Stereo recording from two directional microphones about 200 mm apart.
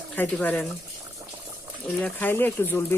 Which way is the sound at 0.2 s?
5° left (ahead or behind).